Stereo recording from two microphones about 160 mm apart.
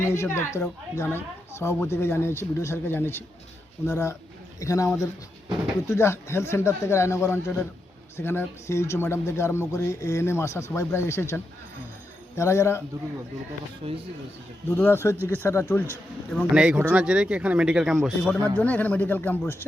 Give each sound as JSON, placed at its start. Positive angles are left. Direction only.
{"t": 0.0, "sound": "speech", "side_deg": 15}
{"t": 13.8, "sound": "speech", "side_deg": -40}
{"t": 14.8, "sound": "speech", "side_deg": 15}
{"t": 16.3, "sound": "speech", "side_deg": 0}
{"t": 18.5, "sound": "speech", "side_deg": 10}